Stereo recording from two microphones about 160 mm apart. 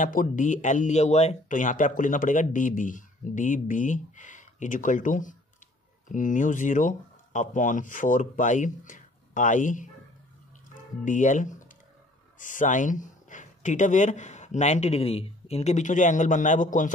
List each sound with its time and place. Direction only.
0.0 s speech: 55° left (ahead or behind)
11.1 s speech: 50° left (ahead or behind)